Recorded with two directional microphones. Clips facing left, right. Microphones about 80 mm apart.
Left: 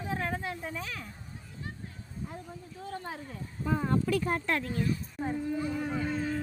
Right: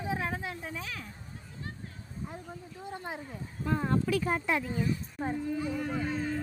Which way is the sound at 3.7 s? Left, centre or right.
Centre.